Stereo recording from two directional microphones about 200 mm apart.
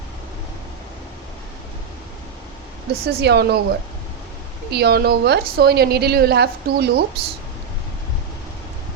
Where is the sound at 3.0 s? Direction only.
55° right (ahead or behind).